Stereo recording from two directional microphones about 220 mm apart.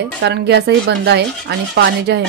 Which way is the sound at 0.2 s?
50° right (ahead or behind).